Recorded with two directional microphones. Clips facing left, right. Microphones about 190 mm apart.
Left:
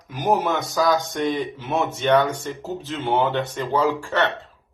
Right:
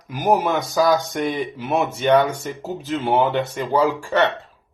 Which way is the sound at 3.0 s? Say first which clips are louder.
Right 2 dB; 15° right (ahead or behind).